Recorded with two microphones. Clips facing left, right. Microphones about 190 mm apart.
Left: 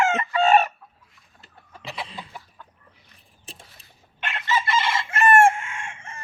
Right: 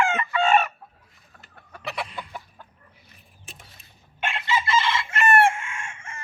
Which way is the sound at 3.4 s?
35° left (ahead or behind).